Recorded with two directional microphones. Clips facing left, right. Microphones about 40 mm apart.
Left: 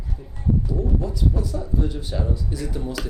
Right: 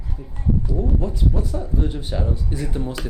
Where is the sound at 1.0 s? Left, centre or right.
Right.